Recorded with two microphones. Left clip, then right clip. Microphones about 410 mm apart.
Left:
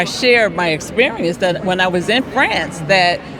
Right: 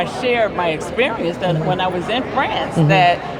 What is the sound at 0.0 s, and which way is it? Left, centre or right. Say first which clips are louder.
Speech: left 4 dB; left.